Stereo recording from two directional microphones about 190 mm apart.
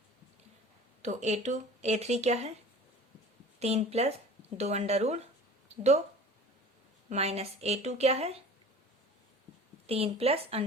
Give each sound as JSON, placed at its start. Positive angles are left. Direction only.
{"t": 1.0, "sound": "speech", "side_deg": -35}
{"t": 3.6, "sound": "speech", "side_deg": -35}
{"t": 7.1, "sound": "speech", "side_deg": -35}
{"t": 9.8, "sound": "speech", "side_deg": -30}